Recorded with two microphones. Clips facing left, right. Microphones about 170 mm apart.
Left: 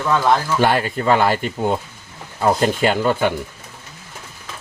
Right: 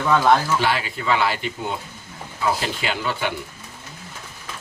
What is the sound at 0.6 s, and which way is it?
Speech, 50° left (ahead or behind).